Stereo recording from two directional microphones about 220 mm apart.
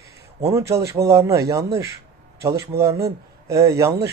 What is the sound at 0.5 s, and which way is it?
A man's voice, 15° right (ahead or behind).